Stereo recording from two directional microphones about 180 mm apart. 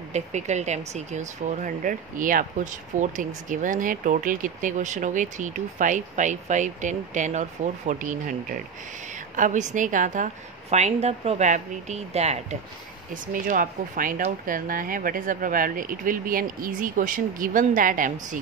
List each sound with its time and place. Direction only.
0.1 s a woman's voice: 40° right (ahead or behind)
13.1 s speech: 50° right (ahead or behind)